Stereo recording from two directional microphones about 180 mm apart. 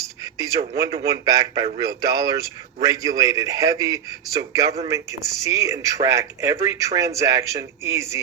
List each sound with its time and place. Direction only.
1.0 s a man's voice: 20° right (ahead or behind)